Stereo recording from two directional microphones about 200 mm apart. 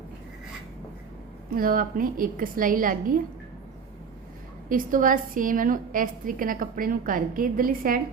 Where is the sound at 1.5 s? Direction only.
45° right (ahead or behind).